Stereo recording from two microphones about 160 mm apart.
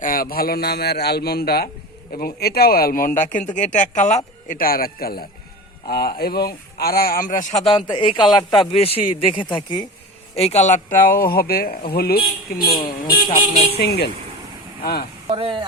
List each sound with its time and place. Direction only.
0.0 s a man's voice: 65° left (ahead or behind); by 4.2 s 45° left (ahead or behind)
4.4 s a man's voice: 65° left (ahead or behind)
7.6 s a man's voice: 35° left (ahead or behind)
8.7 s speech: 35° left (ahead or behind)
10.3 s speech: 40° left (ahead or behind)
11.2 s a man's voice: 70° left (ahead or behind)
13.7 s a man's voice: 85° left
14.8 s speech: 70° left (ahead or behind)
15.3 s speech: 35° right (ahead or behind)